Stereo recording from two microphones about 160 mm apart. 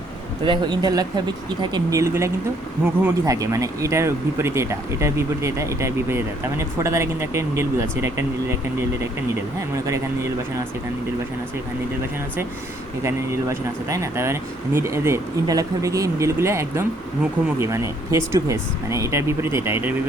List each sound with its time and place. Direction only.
0.4 s speech: 30° right (ahead or behind)
9.6 s speech: 20° right (ahead or behind)
13.0 s speech: 15° right (ahead or behind)